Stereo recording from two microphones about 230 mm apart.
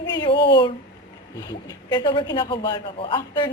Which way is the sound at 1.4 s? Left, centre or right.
Centre.